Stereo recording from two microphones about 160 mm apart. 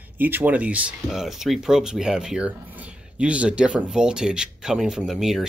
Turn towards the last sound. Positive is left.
turn(degrees=0)  # may be behind; listen again after turning